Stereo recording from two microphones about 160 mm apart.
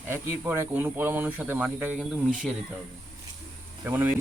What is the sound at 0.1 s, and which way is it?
A man's voice, 15° right (ahead or behind).